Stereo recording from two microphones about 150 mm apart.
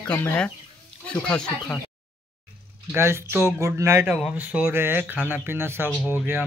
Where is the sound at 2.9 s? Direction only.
15° right (ahead or behind).